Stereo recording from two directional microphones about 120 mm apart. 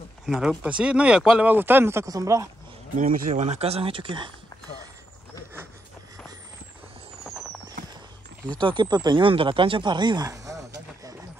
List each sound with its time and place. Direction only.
0.3 s speech: 5° right (ahead or behind); by 2.5 s 25° right (ahead or behind)
3.0 s speech: 90° right; by 4.3 s 45° right (ahead or behind)
8.5 s speech: 40° right (ahead or behind)